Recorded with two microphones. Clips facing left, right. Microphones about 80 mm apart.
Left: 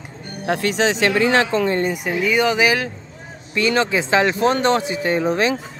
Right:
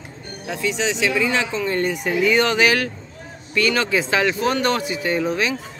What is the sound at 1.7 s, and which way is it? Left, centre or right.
Speech, left.